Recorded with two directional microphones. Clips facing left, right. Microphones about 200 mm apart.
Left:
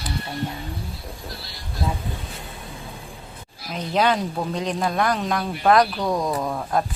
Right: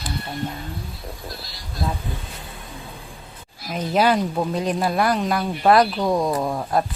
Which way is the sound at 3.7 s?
5° right (ahead or behind).